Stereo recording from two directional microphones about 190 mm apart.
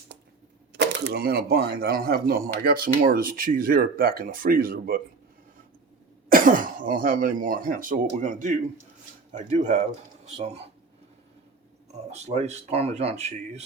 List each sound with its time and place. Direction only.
0.7 s speech: 65° right (ahead or behind); by 4.9 s 50° right (ahead or behind)
6.2 s speech: 45° right (ahead or behind)
12.1 s speech: 35° right (ahead or behind)